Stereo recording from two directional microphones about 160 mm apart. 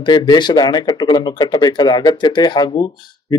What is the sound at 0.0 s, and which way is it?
Speech, 30° left (ahead or behind).